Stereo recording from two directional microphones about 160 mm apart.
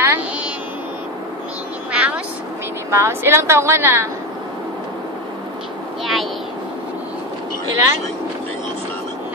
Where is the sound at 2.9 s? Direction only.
15° right (ahead or behind).